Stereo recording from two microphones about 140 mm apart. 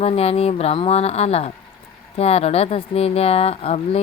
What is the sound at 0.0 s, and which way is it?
Speech, 45° left (ahead or behind).